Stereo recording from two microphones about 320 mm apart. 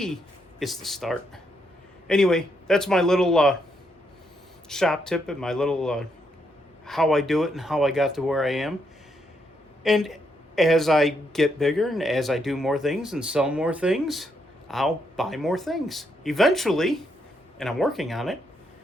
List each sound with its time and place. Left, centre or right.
0.6 s a man's voice: centre
4.7 s a man's voice: centre
9.8 s a man's voice: centre